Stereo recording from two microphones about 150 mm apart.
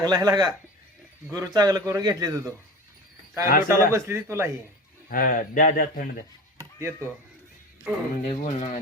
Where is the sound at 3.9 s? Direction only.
20° right (ahead or behind).